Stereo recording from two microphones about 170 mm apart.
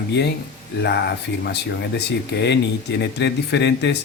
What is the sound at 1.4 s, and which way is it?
Speech, 80° left.